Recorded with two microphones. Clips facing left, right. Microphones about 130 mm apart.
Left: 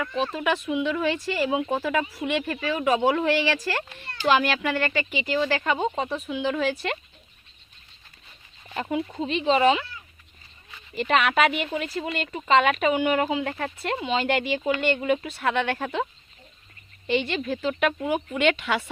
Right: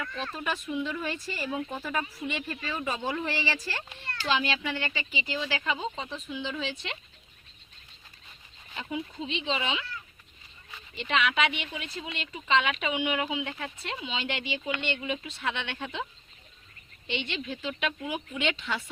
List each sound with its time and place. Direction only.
0.3 s speech: 85° left
4.0 s a child's voice: 15° left (ahead or behind)
4.3 s speech: 65° left (ahead or behind)
8.7 s speech: 55° left (ahead or behind)
10.9 s speech: 45° left (ahead or behind)
17.1 s speech: 45° left (ahead or behind); by 18.9 s 75° left (ahead or behind)